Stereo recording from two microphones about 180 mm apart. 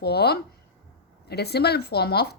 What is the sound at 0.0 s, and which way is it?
A woman's voice, 65° left (ahead or behind).